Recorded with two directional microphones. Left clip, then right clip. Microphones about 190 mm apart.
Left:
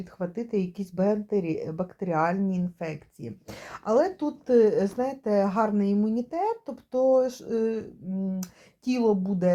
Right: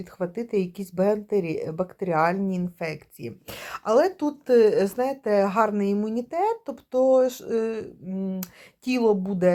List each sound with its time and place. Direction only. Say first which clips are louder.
0.0 s speech: right 3 dB; 35° right (ahead or behind)